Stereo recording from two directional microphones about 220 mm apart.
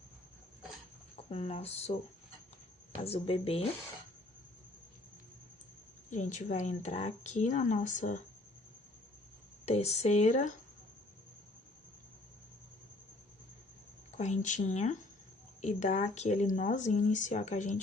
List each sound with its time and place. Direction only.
1.1 s speech: 25° left (ahead or behind)
3.0 s speech: 25° left (ahead or behind)
6.1 s a woman's voice: 35° left (ahead or behind)
9.6 s speech: 30° left (ahead or behind)
14.2 s a woman's voice: 35° left (ahead or behind)